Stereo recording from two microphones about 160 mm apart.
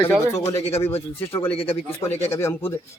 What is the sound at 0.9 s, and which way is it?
Speech, 35° left (ahead or behind).